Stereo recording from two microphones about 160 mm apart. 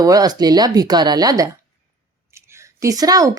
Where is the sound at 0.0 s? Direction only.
25° right (ahead or behind).